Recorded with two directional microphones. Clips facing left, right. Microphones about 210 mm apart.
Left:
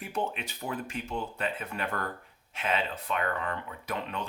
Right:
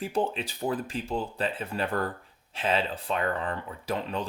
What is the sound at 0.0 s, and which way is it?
Speech, 30° right (ahead or behind).